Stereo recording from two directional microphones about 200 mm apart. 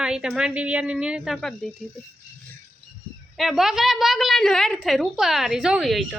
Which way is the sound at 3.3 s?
Centre (ahead or behind).